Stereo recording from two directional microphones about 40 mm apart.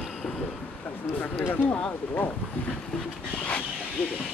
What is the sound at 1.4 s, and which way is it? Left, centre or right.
Speech, left.